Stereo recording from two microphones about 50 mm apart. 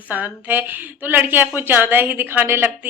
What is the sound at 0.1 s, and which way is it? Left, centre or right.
A woman's voice, right.